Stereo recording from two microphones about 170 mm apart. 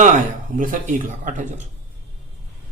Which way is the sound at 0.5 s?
50° right (ahead or behind).